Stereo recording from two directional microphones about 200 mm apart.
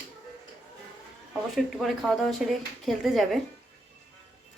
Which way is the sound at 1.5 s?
Centre (ahead or behind).